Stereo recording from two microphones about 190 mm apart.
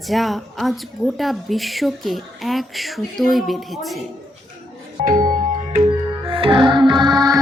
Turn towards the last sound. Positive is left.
turn(degrees=-20)  # may be behind; listen again after turning